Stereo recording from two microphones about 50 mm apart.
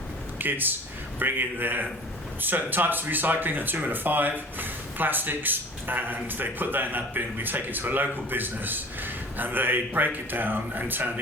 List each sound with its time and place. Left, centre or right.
0.3 s speech: right